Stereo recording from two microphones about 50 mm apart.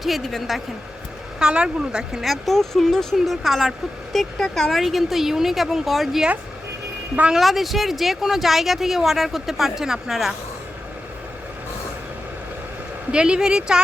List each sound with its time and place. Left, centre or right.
0.0 s speech: centre
1.4 s speech: centre
2.2 s speech: centre
3.4 s speech: centre
7.3 s speech: centre
13.1 s speech: centre